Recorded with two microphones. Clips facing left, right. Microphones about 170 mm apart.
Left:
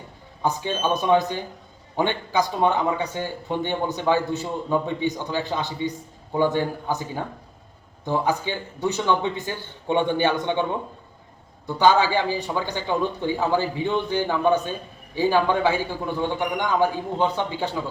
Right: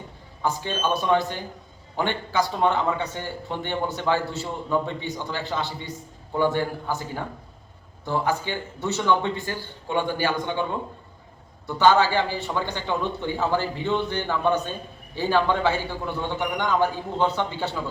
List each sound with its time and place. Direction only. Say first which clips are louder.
0.4 s a man's voice: left 2 dB; 15° left (ahead or behind)